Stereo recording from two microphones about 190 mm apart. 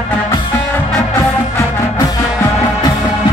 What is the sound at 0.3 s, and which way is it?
Music, 15° left (ahead or behind).